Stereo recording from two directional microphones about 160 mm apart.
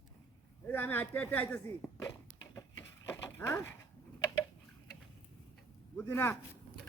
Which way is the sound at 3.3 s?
15° left (ahead or behind).